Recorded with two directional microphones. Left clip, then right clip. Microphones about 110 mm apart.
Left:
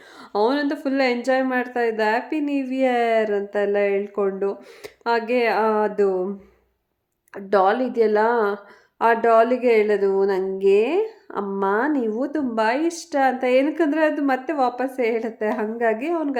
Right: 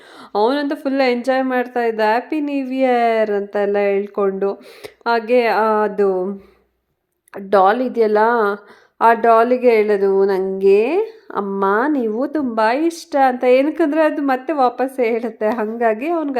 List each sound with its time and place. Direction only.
0.3 s a woman's voice: 30° right (ahead or behind)
7.3 s a woman's voice: 30° right (ahead or behind)